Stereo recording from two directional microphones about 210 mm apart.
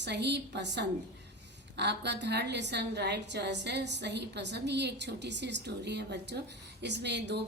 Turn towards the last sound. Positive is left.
turn(degrees=-55)  # may be behind; listen again after turning